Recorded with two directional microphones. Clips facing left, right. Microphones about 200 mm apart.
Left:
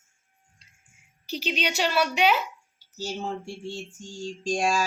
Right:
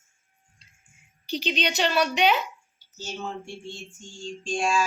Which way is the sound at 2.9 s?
35° left (ahead or behind).